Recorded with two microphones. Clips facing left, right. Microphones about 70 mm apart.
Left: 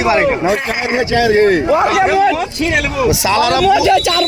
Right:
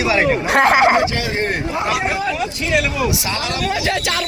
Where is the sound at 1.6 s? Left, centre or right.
Left.